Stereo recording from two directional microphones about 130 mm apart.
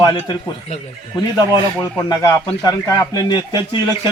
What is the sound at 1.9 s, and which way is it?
Speech, 30° left (ahead or behind).